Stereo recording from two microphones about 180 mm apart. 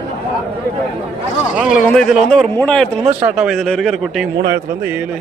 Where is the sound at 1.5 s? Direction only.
5° right (ahead or behind).